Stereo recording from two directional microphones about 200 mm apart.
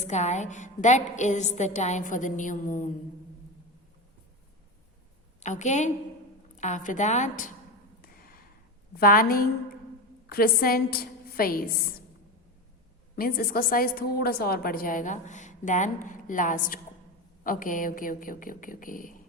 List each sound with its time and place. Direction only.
0.0 s a woman's voice: 35° left (ahead or behind)
5.4 s a woman's voice: 35° left (ahead or behind)
8.0 s a sound: 50° left (ahead or behind)
9.0 s a woman's voice: 45° left (ahead or behind)
13.1 s a woman's voice: 45° left (ahead or behind)